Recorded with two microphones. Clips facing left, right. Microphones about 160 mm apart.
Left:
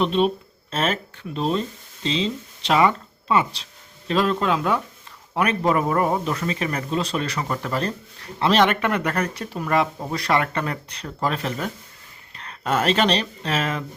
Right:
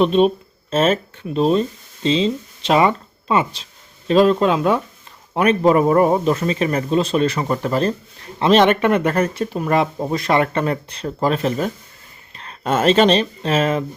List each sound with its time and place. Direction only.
0.0 s speech: 20° right (ahead or behind)